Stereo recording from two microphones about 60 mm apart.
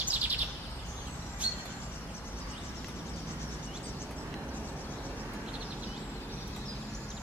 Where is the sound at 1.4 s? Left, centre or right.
Right.